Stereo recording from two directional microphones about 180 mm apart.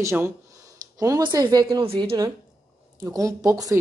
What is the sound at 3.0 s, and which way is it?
Speech, 20° right (ahead or behind).